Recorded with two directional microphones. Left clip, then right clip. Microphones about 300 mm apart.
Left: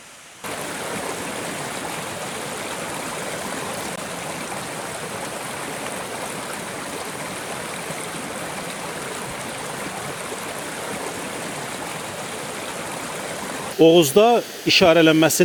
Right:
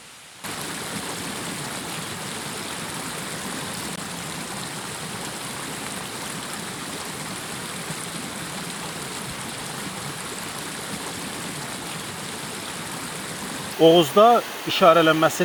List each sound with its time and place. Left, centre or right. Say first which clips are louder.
13.8 s speech: left 1 dB; left